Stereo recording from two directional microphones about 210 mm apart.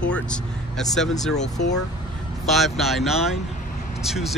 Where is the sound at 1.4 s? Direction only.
35° left (ahead or behind).